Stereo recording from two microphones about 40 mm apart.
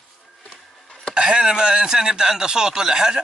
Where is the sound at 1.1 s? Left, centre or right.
Centre.